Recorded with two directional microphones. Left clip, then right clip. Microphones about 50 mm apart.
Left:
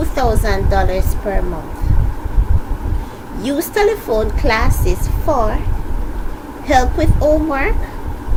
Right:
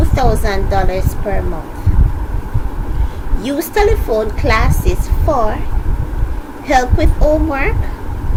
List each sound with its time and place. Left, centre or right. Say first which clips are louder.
0.0 s a woman's voice: right 1 dB; left
3.4 s a woman's voice: right 1 dB; left
6.7 s a woman's voice: right 1 dB; left